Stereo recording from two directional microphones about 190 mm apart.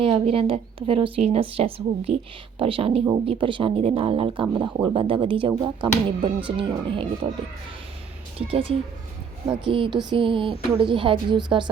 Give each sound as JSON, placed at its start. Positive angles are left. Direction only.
{"t": 0.0, "sound": "speech", "side_deg": -30}
{"t": 8.4, "sound": "speech", "side_deg": -30}